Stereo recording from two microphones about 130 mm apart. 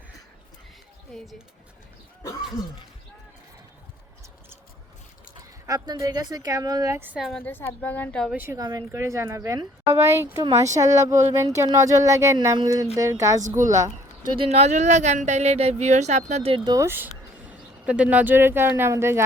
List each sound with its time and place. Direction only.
1.1 s speech: centre (ahead or behind)
5.6 s speech: 30° right (ahead or behind)
7.2 s speech: centre (ahead or behind)
7.4 s a woman's voice: 15° left (ahead or behind)
8.5 s speech: 30° right (ahead or behind)
14.3 s speech: 50° right (ahead or behind)
16.6 s speech: 20° right (ahead or behind)